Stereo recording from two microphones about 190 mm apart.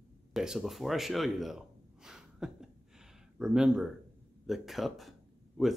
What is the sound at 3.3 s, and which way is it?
Speech, 5° right (ahead or behind).